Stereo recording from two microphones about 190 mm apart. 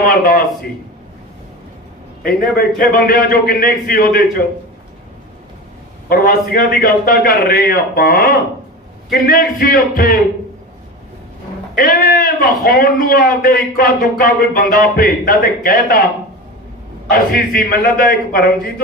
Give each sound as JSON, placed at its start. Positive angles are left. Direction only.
{"t": 0.0, "sound": "a man's voice", "side_deg": 50}
{"t": 2.2, "sound": "a man's voice", "side_deg": 50}
{"t": 6.1, "sound": "a man's voice", "side_deg": 50}
{"t": 11.8, "sound": "a man's voice", "side_deg": 50}
{"t": 17.1, "sound": "a man's voice", "side_deg": 50}